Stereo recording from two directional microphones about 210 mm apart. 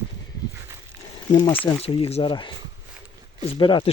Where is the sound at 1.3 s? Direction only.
20° left (ahead or behind).